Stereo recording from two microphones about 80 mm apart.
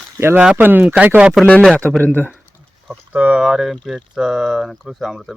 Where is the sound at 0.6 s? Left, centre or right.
Right.